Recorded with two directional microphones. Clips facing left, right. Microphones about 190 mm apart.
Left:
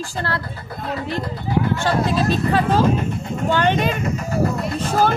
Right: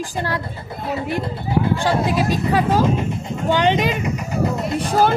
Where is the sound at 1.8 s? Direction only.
10° right (ahead or behind).